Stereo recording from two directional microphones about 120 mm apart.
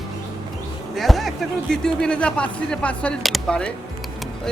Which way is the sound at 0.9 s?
Centre (ahead or behind).